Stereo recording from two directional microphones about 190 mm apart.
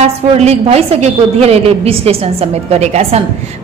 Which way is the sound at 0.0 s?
35° right (ahead or behind).